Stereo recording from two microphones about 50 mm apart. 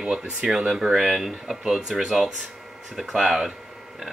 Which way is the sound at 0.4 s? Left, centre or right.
Centre.